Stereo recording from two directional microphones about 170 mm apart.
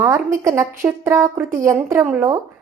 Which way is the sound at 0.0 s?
15° right (ahead or behind).